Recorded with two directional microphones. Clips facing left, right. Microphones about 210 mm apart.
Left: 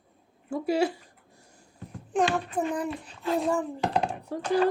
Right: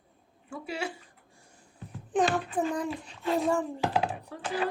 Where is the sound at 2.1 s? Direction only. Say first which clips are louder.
Left 1 dB; centre (ahead or behind).